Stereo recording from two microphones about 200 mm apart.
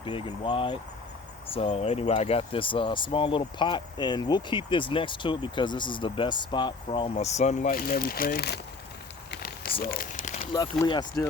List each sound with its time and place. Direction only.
0.0 s speech: 25° left (ahead or behind); by 8.5 s 50° left (ahead or behind)
9.3 s a sound: 50° left (ahead or behind)
9.8 s speech: 45° left (ahead or behind)
10.5 s speech: 20° left (ahead or behind)